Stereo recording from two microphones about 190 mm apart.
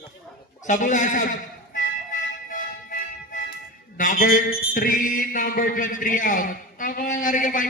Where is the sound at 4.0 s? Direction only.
45° left (ahead or behind).